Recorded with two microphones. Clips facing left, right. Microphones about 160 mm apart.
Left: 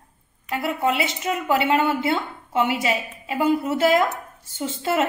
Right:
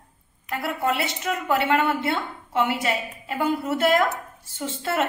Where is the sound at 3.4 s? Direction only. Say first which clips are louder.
Left 3 dB; 25° left (ahead or behind).